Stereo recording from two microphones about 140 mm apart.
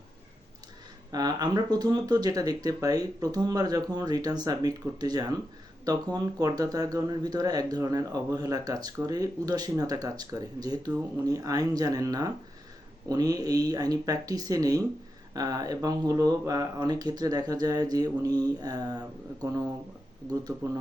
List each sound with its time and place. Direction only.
1.1 s speech: 30° right (ahead or behind)